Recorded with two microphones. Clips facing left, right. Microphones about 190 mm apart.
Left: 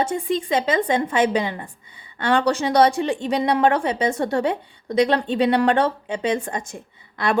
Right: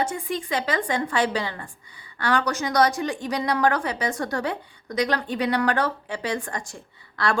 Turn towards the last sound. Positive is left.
turn(degrees=20)  # may be behind; listen again after turning